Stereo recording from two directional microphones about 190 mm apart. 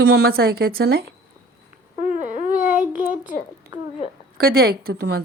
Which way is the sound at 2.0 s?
40° right (ahead or behind).